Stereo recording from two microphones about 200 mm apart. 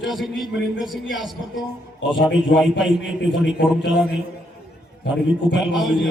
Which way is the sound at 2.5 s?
60° left (ahead or behind).